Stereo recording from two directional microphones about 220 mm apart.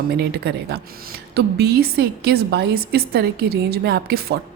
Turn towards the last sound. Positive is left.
turn(degrees=-45)  # may be behind; listen again after turning